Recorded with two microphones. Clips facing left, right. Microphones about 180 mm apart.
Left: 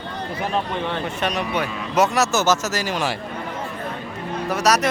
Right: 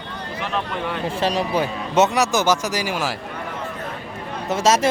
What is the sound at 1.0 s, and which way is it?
A man's voice, 30° right (ahead or behind).